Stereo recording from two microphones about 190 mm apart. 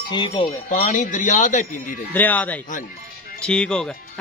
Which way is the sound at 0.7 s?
40° left (ahead or behind).